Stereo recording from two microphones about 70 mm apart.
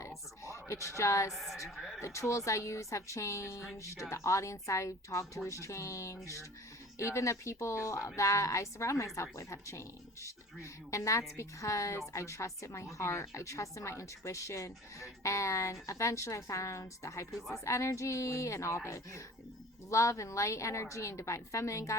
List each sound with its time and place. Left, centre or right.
0.4 s speech: left
1.3 s a woman's voice: centre
2.0 s speech: left